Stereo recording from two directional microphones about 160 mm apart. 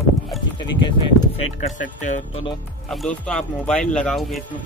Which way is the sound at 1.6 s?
50° left (ahead or behind).